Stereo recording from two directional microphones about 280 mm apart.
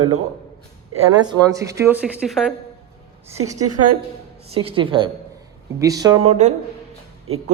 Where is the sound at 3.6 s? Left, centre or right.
Right.